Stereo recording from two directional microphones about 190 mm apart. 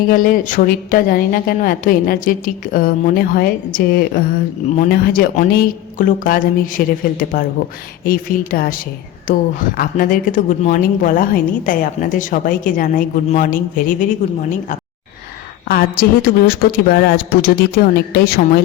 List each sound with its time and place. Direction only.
0.1 s a woman's voice: 45° left (ahead or behind)
15.7 s a woman's voice: 50° left (ahead or behind)